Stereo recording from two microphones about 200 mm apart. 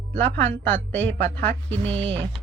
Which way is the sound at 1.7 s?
30° right (ahead or behind).